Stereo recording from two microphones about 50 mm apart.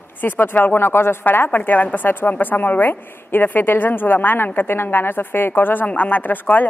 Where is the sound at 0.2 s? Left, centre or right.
Left.